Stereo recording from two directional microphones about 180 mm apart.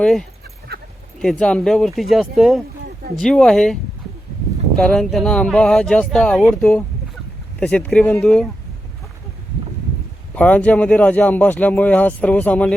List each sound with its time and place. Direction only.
0.0 s speech: 5° left (ahead or behind)
0.7 s a sound: 60° right (ahead or behind)
1.2 s speech: 5° left (ahead or behind)
4.8 s speech: 5° left (ahead or behind)
10.3 s speech: 5° left (ahead or behind)